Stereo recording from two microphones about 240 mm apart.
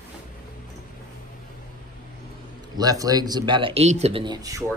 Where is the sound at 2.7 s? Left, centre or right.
Centre.